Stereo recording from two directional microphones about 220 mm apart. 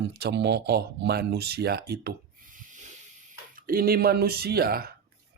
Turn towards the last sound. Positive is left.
turn(degrees=-45)  # may be behind; listen again after turning